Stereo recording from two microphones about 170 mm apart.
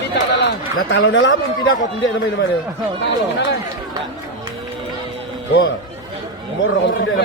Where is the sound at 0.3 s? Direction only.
90° left.